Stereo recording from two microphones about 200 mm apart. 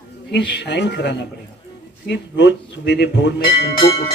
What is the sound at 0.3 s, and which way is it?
Speech, 60° left (ahead or behind).